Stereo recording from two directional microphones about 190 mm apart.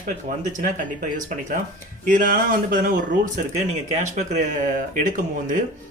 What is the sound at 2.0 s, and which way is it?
Speech, 45° right (ahead or behind).